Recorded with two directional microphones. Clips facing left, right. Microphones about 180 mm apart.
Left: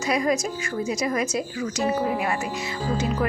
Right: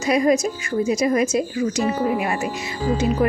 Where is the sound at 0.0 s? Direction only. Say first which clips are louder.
Right 5 dB; 20° right (ahead or behind).